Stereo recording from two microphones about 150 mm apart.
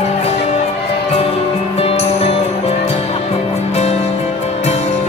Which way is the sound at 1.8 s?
40° left (ahead or behind).